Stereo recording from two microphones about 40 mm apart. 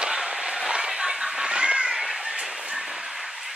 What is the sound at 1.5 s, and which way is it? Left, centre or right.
Cat, right.